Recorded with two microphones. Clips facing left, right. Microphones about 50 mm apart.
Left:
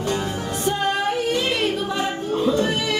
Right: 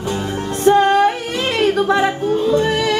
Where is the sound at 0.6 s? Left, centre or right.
Right.